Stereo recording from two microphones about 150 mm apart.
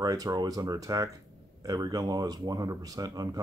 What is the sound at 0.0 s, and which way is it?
Speech, 25° right (ahead or behind).